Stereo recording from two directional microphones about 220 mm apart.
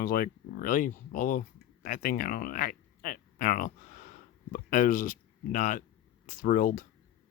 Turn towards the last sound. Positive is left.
turn(degrees=40)  # may be behind; listen again after turning